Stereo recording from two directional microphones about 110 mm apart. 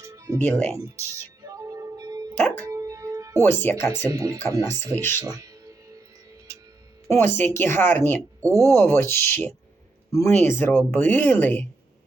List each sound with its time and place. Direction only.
0.0 s music: 30° right (ahead or behind)
2.3 s music: 15° left (ahead or behind)
2.6 s music: 30° right (ahead or behind)
3.4 s speech: 20° left (ahead or behind)
4.1 s speech: 30° right (ahead or behind)
4.8 s speech: 20° left (ahead or behind)
5.2 s music: 30° right (ahead or behind)
7.1 s speech: 20° left (ahead or behind)
8.4 s speech: 30° right (ahead or behind)
8.7 s speech: 20° left (ahead or behind)